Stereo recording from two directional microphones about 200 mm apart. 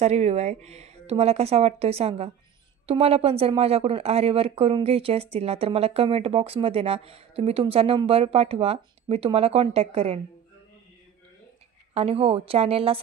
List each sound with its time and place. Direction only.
0.0 s speech: 35° right (ahead or behind)
11.9 s speech: 30° right (ahead or behind)